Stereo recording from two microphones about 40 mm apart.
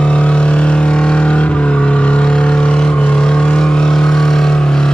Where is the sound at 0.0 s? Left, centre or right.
Left.